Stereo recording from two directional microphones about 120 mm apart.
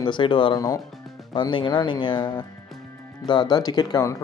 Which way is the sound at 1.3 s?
40° left (ahead or behind).